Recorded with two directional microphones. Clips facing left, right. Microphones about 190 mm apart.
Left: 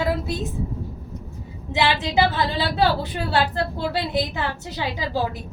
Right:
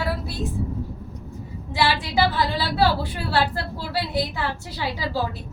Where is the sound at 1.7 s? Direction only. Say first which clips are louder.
Left 2 dB; 20° left (ahead or behind).